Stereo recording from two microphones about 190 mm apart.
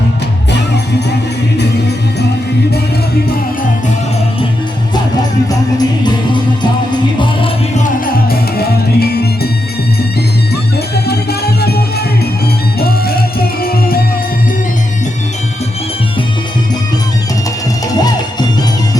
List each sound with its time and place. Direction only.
5.5 s music: 20° left (ahead or behind)
7.8 s music: 45° left (ahead or behind)
11.0 s music: 55° left (ahead or behind)